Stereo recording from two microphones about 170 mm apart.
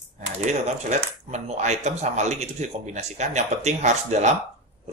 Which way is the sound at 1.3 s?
40° right (ahead or behind).